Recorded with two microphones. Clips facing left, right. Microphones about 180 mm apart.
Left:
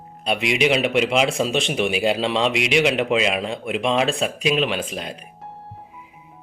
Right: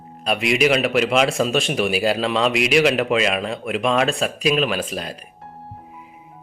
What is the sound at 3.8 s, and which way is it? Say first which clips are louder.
Speech: right 1 dB; 25° left (ahead or behind).